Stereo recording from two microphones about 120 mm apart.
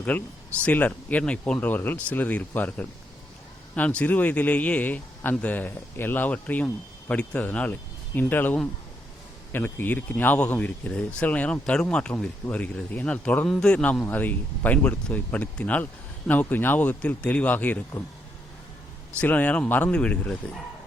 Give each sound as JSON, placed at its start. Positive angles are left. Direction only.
{"t": 0.1, "sound": "speech", "side_deg": 15}
{"t": 19.2, "sound": "speech", "side_deg": 15}